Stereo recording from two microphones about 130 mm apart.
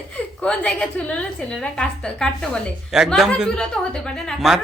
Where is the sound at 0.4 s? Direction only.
10° left (ahead or behind).